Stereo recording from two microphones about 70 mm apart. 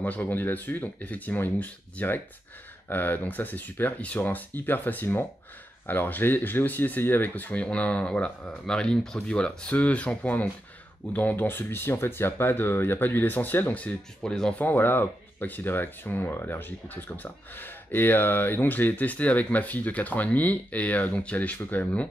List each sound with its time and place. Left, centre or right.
0.0 s speech: left